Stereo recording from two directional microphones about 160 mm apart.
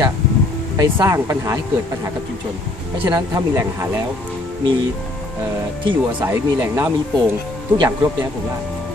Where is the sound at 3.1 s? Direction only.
25° right (ahead or behind).